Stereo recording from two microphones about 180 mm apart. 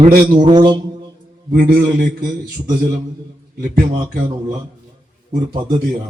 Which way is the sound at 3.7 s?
60° right (ahead or behind).